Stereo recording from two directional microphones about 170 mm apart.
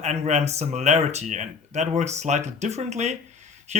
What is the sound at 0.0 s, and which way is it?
Speech, 40° right (ahead or behind).